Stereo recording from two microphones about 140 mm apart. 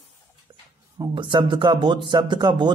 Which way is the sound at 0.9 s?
35° right (ahead or behind).